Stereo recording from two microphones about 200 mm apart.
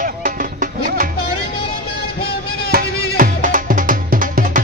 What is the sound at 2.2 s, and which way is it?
Music, 50° left (ahead or behind).